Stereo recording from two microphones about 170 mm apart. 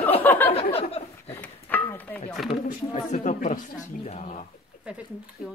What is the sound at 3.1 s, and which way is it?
A woman's voice, 45° left (ahead or behind).